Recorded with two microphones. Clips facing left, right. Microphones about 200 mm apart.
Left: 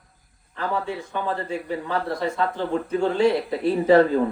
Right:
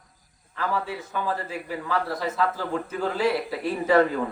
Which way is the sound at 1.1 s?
30° left (ahead or behind).